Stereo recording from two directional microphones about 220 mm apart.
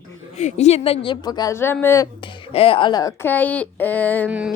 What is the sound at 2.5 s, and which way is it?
A woman's voice, 25° left (ahead or behind).